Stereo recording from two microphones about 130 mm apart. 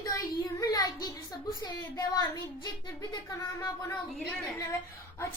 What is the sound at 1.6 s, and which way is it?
A woman's voice, 35° left (ahead or behind).